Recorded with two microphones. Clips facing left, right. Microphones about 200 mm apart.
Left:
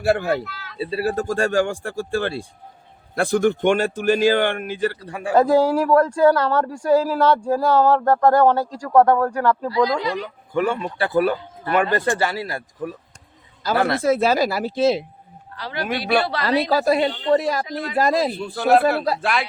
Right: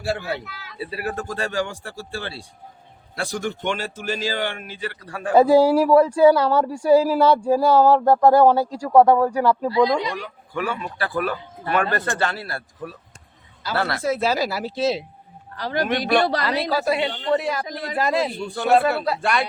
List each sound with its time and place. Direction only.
0.0 s a man's voice: 50° left (ahead or behind)
0.4 s speech: 15° right (ahead or behind)
0.8 s a man's voice: 30° left (ahead or behind); by 4.9 s 50° left (ahead or behind)
4.9 s speech: 20° left (ahead or behind)
5.3 s speech: 10° right (ahead or behind)
9.6 s speech: 25° right (ahead or behind)
10.1 s speech: 20° left (ahead or behind)
11.7 s speech: 15° left (ahead or behind)
14.0 s a man's voice: 50° left (ahead or behind)
15.5 s a man's voice: 45° right (ahead or behind)
15.9 s speech: 5° left (ahead or behind)
16.4 s a woman's voice: 40° left (ahead or behind)
18.5 s speech: 5° left (ahead or behind)